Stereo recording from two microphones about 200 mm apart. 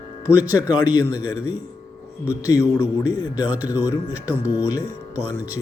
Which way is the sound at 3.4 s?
10° right (ahead or behind).